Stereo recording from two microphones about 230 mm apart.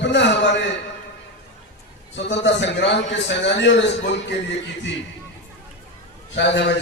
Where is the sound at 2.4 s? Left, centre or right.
Left.